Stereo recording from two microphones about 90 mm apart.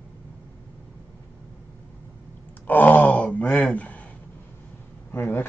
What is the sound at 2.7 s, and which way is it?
Gasp, 20° left (ahead or behind).